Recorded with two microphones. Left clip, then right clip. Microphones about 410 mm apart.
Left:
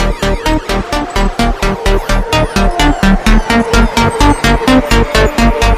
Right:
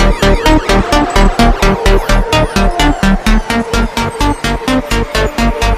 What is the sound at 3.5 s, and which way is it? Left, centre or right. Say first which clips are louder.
Music: left 3 dB; left.